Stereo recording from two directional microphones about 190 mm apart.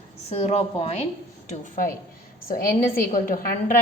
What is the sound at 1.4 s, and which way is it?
Speech, 45° left (ahead or behind).